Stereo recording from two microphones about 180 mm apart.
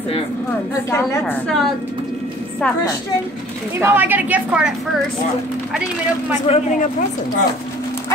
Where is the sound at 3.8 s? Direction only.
10° right (ahead or behind).